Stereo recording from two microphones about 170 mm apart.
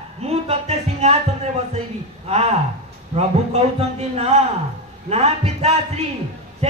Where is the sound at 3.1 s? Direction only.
35° right (ahead or behind).